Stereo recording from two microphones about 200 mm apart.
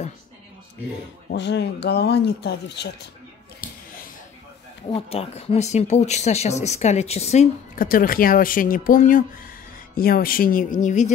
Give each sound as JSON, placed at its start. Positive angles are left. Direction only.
{"t": 1.3, "sound": "speech", "side_deg": 60}
{"t": 3.6, "sound": "a sound", "side_deg": 45}
{"t": 4.8, "sound": "speech", "side_deg": 30}